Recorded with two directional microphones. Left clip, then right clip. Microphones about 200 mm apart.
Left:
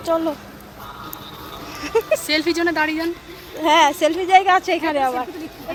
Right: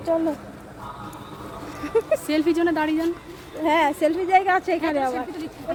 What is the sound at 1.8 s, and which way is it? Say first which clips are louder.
Speech: left 3 dB; 5° left (ahead or behind).